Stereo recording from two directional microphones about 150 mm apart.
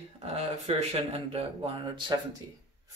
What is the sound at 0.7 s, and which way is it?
Speech, 40° right (ahead or behind).